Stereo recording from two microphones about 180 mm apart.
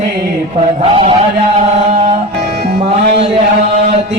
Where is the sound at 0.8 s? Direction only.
30° right (ahead or behind).